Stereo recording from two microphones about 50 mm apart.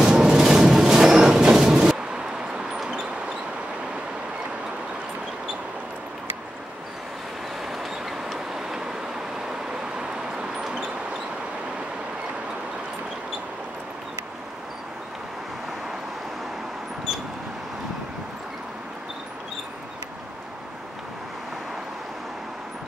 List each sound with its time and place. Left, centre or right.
0.0 s train: centre
7.6 s train: centre
9.9 s vehicle: centre